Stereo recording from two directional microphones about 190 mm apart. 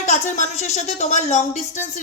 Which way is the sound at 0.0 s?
40° left (ahead or behind).